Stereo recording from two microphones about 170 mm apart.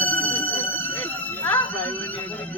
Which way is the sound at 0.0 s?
10° left (ahead or behind).